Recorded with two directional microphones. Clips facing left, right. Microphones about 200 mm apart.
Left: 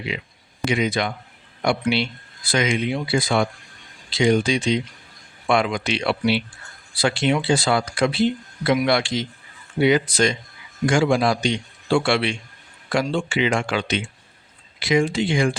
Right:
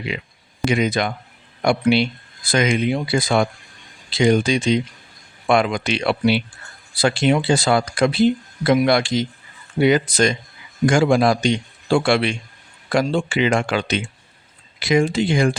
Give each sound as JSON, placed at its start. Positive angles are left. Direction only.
{"t": 0.1, "sound": "speech", "side_deg": -50}